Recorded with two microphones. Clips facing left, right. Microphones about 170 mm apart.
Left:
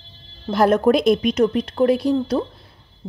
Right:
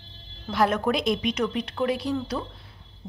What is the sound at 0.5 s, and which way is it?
A woman's voice, 45° left (ahead or behind).